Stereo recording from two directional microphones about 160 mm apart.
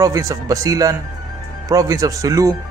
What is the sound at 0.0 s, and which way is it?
Speech, 20° right (ahead or behind).